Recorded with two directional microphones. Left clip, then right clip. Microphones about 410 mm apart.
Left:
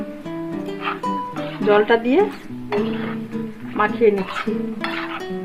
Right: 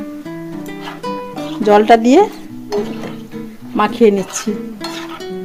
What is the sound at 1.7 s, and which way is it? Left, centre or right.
Speech, centre.